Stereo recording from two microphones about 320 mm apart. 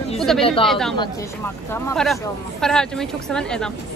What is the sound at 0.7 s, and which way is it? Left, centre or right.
Speech, centre.